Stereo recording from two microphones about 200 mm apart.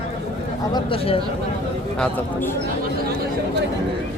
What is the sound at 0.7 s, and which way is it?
Speech, 25° left (ahead or behind).